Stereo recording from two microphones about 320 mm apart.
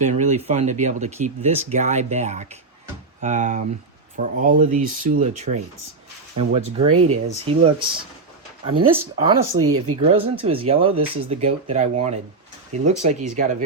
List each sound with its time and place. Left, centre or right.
0.0 s speech: right
8.9 s speech: centre
9.6 s speech: right
10.1 s speech: centre
10.9 s speech: right
11.3 s speech: centre